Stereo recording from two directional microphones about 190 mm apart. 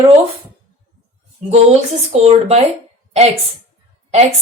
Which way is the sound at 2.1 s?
35° right (ahead or behind).